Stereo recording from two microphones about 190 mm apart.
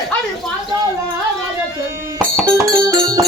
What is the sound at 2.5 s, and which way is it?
Music, 15° right (ahead or behind).